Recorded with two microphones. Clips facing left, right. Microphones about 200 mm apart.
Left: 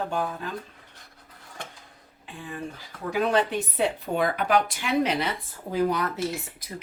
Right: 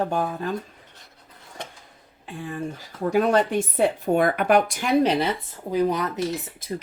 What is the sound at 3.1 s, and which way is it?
Speech, 45° right (ahead or behind).